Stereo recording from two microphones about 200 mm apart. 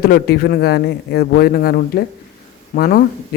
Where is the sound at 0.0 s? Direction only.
50° left (ahead or behind).